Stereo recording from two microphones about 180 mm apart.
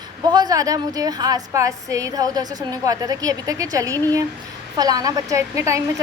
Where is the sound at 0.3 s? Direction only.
20° right (ahead or behind).